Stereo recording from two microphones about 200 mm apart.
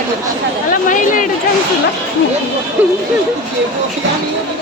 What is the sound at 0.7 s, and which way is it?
Speech, 40° left (ahead or behind).